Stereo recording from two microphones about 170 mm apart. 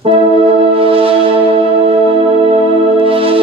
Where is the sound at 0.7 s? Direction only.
35° right (ahead or behind).